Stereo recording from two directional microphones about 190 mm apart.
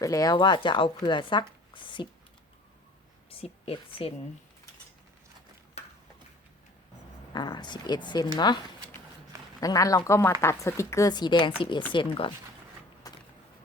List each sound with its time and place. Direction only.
0.0 s speech: 15° left (ahead or behind)
3.2 s a woman's voice: 30° left (ahead or behind)
7.3 s speech: 25° left (ahead or behind)
13.0 s a sound: 20° left (ahead or behind)